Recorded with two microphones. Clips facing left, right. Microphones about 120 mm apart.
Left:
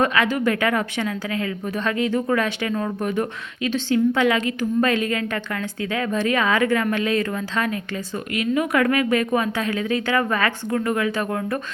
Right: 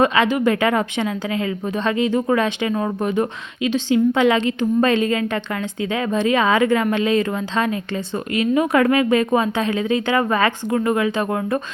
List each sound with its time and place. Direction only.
0.0 s a woman's voice: 20° right (ahead or behind)